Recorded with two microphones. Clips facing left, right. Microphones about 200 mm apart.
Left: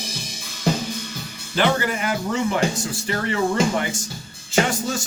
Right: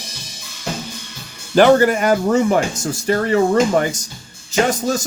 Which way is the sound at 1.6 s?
45° right (ahead or behind).